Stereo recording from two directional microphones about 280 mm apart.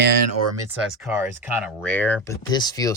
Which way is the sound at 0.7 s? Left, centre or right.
Centre.